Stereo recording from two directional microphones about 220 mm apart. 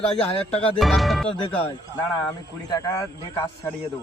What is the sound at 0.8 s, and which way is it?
Speech, centre (ahead or behind).